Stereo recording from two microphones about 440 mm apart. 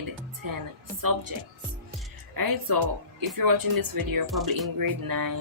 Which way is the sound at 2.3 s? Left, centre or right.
Right.